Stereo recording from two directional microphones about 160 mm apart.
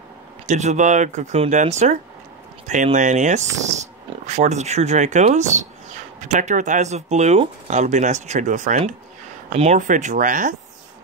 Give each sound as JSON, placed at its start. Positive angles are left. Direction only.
{"t": 0.5, "sound": "speech", "side_deg": -45}